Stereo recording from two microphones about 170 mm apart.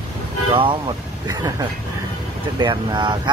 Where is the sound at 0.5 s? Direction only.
30° right (ahead or behind).